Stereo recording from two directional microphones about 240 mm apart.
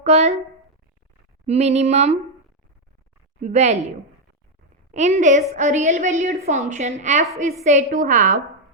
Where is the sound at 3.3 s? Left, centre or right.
Right.